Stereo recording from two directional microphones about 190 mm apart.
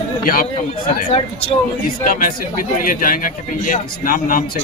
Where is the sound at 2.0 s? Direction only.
45° left (ahead or behind).